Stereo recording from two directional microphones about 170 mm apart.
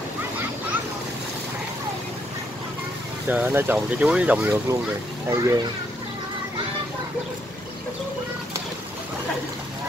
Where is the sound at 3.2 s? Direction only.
10° right (ahead or behind).